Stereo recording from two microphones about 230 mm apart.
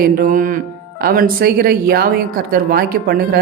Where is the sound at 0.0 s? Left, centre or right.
Right.